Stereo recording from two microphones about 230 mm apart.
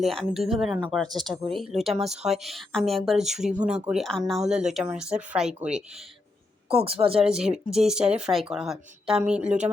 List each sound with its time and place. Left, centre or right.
0.0 s speech: centre
1.0 s speech: centre
1.3 s speech: centre
6.7 s speech: right
7.1 s speech: centre